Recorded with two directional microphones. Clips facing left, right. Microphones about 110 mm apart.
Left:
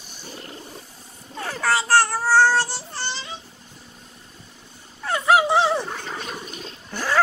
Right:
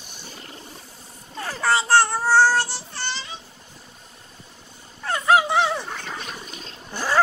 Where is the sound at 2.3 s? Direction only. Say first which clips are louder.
Even; 10° right (ahead or behind).